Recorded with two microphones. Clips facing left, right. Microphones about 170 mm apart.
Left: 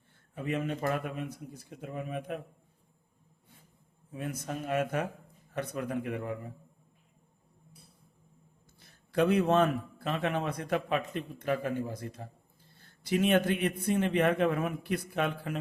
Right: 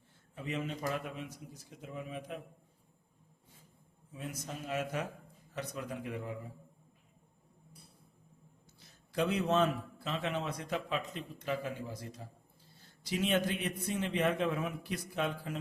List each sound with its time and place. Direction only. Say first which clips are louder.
0.3 s a man's voice: left 5 dB; 55° left (ahead or behind)
4.1 s a man's voice: left 6 dB; 55° left (ahead or behind)
8.8 s a man's voice: left 6 dB; 55° left (ahead or behind)